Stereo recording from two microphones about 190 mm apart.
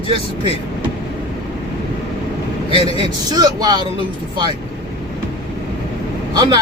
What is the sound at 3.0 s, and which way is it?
Speech, 20° right (ahead or behind).